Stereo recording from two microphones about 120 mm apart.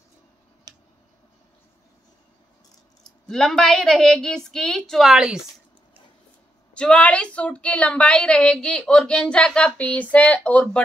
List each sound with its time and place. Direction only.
0.7 s tick-tock: 35° right (ahead or behind)
3.3 s speech: 5° left (ahead or behind)
6.7 s a woman's voice: 10° left (ahead or behind)